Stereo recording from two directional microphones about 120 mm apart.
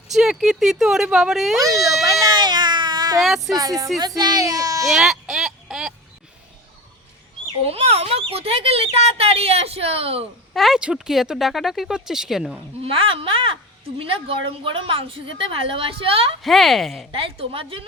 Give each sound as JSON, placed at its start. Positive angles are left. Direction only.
{"t": 0.1, "sound": "speech", "side_deg": -5}
{"t": 1.6, "sound": "a child's voice", "side_deg": -30}
{"t": 2.2, "sound": "cat", "side_deg": -35}
{"t": 3.2, "sound": "speech", "side_deg": 0}
{"t": 3.6, "sound": "a child's voice", "side_deg": -30}
{"t": 4.9, "sound": "a sound", "side_deg": 0}
{"t": 7.6, "sound": "speech", "side_deg": -55}
{"t": 10.5, "sound": "speech", "side_deg": 0}
{"t": 12.8, "sound": "a woman's voice", "side_deg": -50}
{"t": 16.4, "sound": "speech", "side_deg": 0}
{"t": 17.1, "sound": "a woman's voice", "side_deg": -50}